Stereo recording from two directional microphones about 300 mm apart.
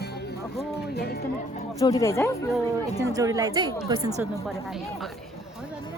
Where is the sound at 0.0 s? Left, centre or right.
Left.